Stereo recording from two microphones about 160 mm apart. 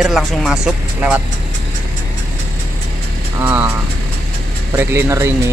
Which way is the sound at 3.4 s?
10° right (ahead or behind).